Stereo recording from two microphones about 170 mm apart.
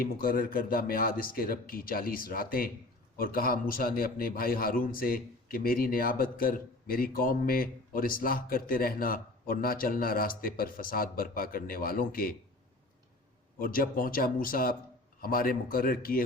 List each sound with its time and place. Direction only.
0.0 s a man's voice: 60° left (ahead or behind)
13.6 s a man's voice: 55° left (ahead or behind)